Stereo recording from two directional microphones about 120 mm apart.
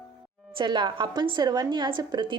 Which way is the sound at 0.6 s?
40° right (ahead or behind).